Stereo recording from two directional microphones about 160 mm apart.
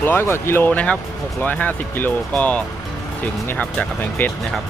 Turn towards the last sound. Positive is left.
turn(degrees=10)  # may be behind; listen again after turning